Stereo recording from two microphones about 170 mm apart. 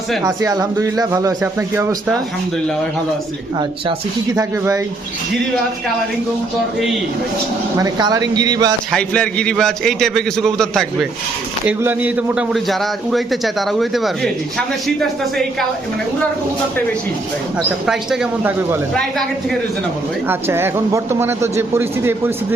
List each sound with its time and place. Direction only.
0.2 s speech: 20° right (ahead or behind)
4.4 s speech: 20° right (ahead or behind)
7.8 s speech: 20° right (ahead or behind)
8.9 s a man's voice: 5° left (ahead or behind)
11.8 s a man's voice: 10° right (ahead or behind)
17.8 s a man's voice: centre (ahead or behind)
20.2 s speech: 15° right (ahead or behind)